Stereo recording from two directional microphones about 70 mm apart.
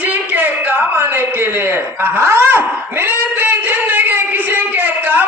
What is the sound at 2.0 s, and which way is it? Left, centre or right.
Speech, right.